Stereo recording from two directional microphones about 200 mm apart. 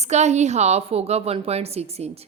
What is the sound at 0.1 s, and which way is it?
A woman's voice, 35° right (ahead or behind).